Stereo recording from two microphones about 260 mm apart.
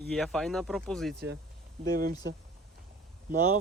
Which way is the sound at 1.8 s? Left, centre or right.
Right.